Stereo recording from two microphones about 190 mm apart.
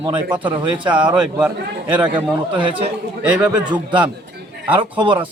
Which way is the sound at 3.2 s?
5° right (ahead or behind).